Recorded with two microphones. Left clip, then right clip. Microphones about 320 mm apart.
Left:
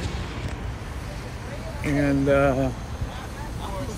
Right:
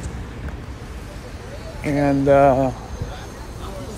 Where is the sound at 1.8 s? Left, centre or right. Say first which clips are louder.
Right 5 dB; centre.